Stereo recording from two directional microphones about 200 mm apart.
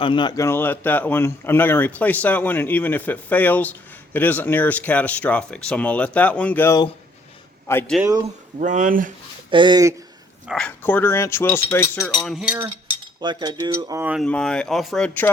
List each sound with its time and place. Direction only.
0.0 s speech: 25° left (ahead or behind)
8.5 s speech: 40° right (ahead or behind)
9.5 s speech: 25° right (ahead or behind)
10.4 s speech: 5° left (ahead or behind)
12.2 s speech: 5° right (ahead or behind)
13.2 s speech: 20° right (ahead or behind)
14.0 s speech: 5° right (ahead or behind)
14.3 s speech: 5° left (ahead or behind)